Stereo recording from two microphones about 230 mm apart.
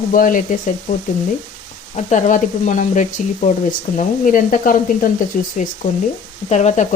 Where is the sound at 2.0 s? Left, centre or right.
Left.